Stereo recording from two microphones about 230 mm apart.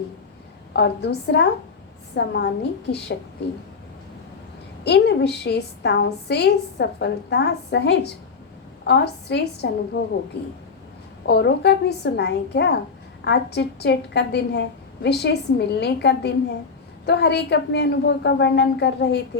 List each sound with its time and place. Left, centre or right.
0.7 s a woman's voice: left
4.8 s a woman's voice: left
11.3 s a woman's voice: left